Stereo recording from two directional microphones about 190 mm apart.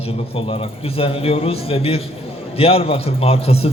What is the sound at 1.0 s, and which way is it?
A man's voice, 30° left (ahead or behind).